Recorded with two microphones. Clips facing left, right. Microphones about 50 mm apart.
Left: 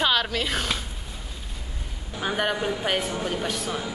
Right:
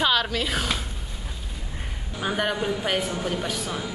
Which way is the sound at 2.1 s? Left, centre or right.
Centre.